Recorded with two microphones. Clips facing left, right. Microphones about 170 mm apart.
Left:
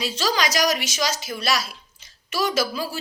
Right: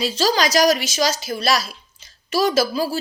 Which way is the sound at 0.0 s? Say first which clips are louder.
Right 5 dB; 30° right (ahead or behind).